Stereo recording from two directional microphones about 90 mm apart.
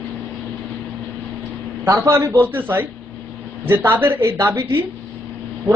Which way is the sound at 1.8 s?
30° right (ahead or behind).